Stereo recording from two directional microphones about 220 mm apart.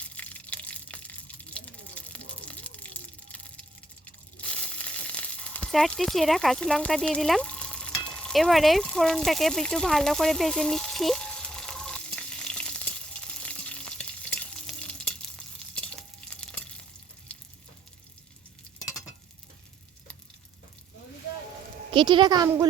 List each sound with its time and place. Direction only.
0.0 s a sound: 5° left (ahead or behind)
18.8 s stir: centre (ahead or behind)
21.9 s speech: 20° right (ahead or behind)